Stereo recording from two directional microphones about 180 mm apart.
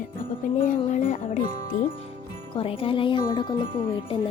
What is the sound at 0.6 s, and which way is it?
Speech, 45° left (ahead or behind).